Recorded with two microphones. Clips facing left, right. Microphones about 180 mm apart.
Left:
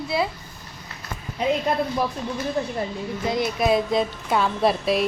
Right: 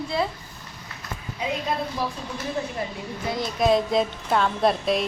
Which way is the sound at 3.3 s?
5° left (ahead or behind).